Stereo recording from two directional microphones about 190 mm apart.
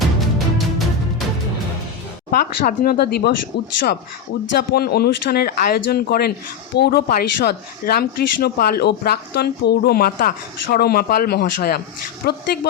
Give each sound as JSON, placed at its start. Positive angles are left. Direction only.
{"t": 2.3, "sound": "speech", "side_deg": 50}
{"t": 4.5, "sound": "speech", "side_deg": 55}